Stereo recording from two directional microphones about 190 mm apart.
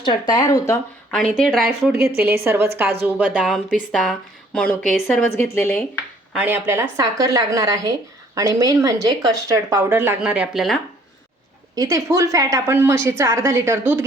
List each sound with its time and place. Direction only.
0.0 s speech: 20° left (ahead or behind)
1.1 s speech: 5° left (ahead or behind)
1.9 s speech: 15° right (ahead or behind)
5.4 s speech: 10° left (ahead or behind)
6.3 s speech: 10° right (ahead or behind)
11.7 s speech: 20° right (ahead or behind)